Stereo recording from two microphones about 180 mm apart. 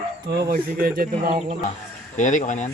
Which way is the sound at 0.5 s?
55° right (ahead or behind).